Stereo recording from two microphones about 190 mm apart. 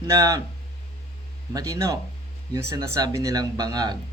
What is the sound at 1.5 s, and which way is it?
A man's voice, 15° right (ahead or behind).